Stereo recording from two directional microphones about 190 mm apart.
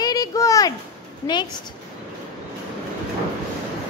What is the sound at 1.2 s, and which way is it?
Speech, 25° left (ahead or behind).